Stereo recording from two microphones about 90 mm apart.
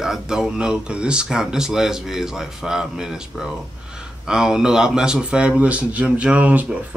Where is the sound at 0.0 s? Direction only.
5° right (ahead or behind).